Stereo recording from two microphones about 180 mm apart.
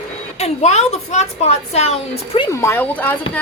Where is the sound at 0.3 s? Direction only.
35° left (ahead or behind).